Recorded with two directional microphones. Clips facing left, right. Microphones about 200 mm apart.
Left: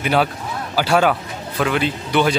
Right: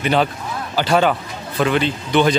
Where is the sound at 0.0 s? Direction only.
5° left (ahead or behind).